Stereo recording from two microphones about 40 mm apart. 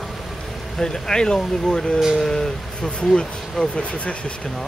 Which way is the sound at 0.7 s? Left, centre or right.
Centre.